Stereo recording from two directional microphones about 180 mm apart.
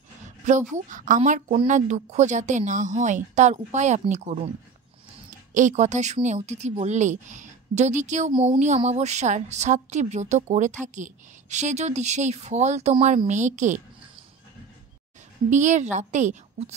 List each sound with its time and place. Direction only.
0.5 s a woman's voice: 40° right (ahead or behind)
5.5 s a woman's voice: 45° right (ahead or behind)
8.3 s a woman's voice: 30° right (ahead or behind)
15.5 s a woman's voice: 40° right (ahead or behind)